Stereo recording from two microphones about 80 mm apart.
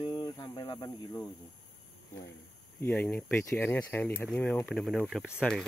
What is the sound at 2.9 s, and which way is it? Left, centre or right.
Speech, centre.